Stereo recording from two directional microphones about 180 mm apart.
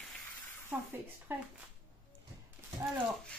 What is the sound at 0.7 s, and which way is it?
Speech, 5° right (ahead or behind).